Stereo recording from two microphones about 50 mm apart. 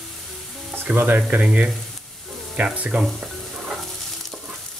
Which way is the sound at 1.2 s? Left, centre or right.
Right.